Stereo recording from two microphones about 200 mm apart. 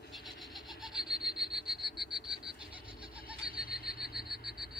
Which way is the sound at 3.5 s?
50° left (ahead or behind).